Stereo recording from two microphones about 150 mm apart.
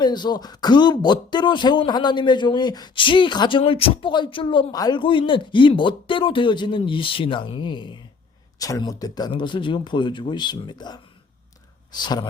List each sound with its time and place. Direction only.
0.0 s speech: 30° left (ahead or behind)